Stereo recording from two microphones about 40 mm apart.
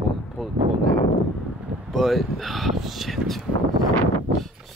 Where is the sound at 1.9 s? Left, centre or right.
Centre.